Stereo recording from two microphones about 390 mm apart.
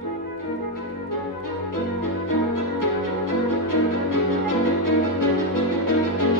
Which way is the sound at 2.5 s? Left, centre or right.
Left.